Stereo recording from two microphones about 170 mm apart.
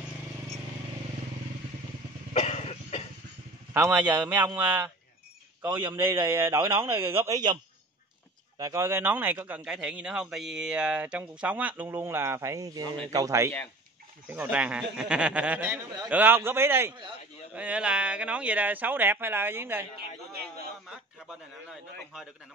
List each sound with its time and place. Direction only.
2.3 s cough: 40° left (ahead or behind)
3.7 s a man's voice: 10° right (ahead or behind)
5.7 s a man's voice: 30° right (ahead or behind)
6.2 s a man's voice: 15° right (ahead or behind)
8.5 s a man's voice: 20° right (ahead or behind)
20.9 s a sound: 5° right (ahead or behind)